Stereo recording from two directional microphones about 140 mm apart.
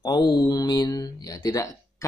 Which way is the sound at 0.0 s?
30° left (ahead or behind).